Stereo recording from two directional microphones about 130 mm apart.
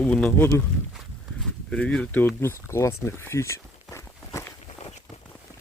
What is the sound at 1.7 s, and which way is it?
Speech, 5° left (ahead or behind).